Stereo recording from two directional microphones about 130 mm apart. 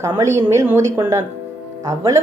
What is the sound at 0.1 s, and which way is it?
Speech, 25° right (ahead or behind).